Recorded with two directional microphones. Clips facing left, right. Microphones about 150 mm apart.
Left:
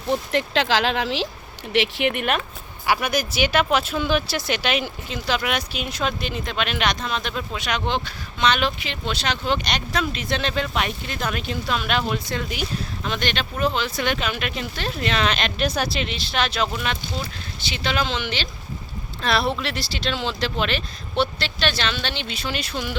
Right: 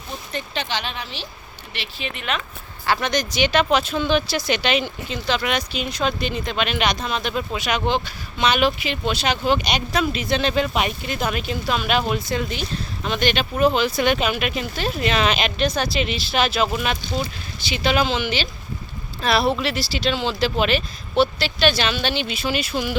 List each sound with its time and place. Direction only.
0.1 s speech: 90° left
1.7 s speech: 75° left (ahead or behind); by 2.4 s 55° left (ahead or behind)
2.8 s speech: 10° left (ahead or behind); by 23.0 s 5° right (ahead or behind)